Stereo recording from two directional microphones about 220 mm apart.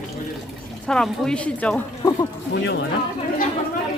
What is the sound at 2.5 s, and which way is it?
Speech, 55° left (ahead or behind).